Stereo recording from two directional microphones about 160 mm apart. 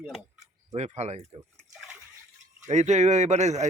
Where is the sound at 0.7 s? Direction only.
40° right (ahead or behind).